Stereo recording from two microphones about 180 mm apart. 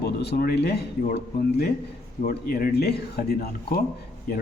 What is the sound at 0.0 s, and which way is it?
Speech, 65° left (ahead or behind).